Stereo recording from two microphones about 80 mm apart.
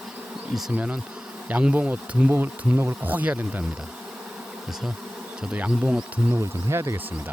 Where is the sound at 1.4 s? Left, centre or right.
Centre.